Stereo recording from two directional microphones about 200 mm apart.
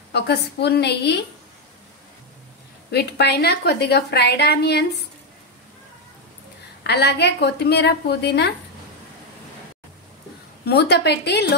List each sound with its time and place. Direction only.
0.1 s a woman's voice: 55° left (ahead or behind)
2.9 s a woman's voice: 55° left (ahead or behind)
6.8 s a woman's voice: 55° left (ahead or behind)
10.6 s a woman's voice: 55° left (ahead or behind)